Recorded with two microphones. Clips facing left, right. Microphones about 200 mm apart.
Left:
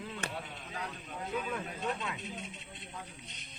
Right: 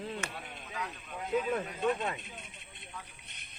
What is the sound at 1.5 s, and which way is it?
Speech, 55° right (ahead or behind).